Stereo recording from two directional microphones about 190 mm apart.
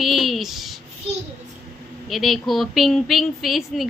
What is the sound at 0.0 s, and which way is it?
Speech, centre (ahead or behind).